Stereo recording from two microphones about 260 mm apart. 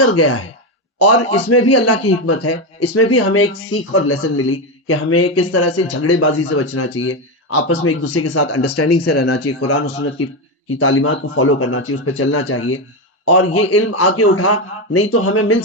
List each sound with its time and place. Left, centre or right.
0.0 s speech: left